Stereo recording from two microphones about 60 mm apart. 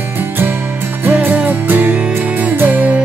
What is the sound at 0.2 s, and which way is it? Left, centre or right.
Music, right.